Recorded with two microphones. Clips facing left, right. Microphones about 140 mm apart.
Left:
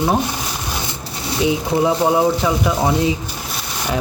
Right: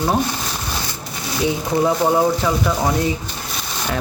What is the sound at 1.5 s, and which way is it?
Speech, 15° left (ahead or behind).